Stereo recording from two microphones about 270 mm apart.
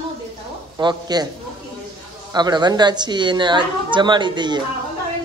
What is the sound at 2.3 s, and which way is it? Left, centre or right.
A man's voice, centre.